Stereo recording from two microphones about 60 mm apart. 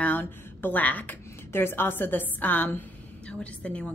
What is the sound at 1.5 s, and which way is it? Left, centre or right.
A woman's voice, left.